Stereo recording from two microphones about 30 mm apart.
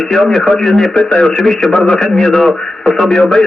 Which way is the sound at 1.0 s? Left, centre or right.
Left.